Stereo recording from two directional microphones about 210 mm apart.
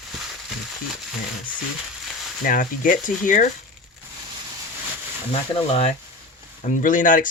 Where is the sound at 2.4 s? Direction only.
40° left (ahead or behind).